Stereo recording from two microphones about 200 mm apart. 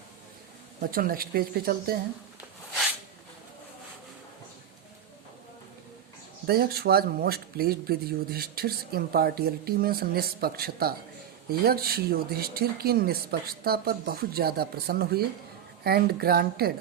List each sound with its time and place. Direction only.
0.8 s speech: 45° right (ahead or behind)
6.5 s speech: 50° right (ahead or behind)